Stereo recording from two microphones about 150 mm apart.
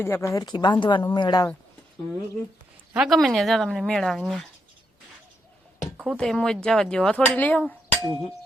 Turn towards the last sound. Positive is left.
turn(degrees=10)  # may be behind; listen again after turning